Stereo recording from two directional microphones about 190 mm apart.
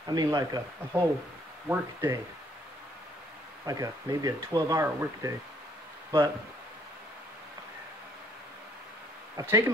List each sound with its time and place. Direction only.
0.0 s speech: 20° right (ahead or behind)
3.6 s speech: 20° right (ahead or behind)
9.4 s speech: 15° right (ahead or behind)